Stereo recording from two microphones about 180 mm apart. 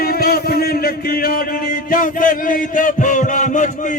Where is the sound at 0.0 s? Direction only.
55° left (ahead or behind).